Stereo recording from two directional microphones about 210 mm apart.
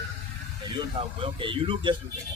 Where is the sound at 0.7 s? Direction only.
25° right (ahead or behind).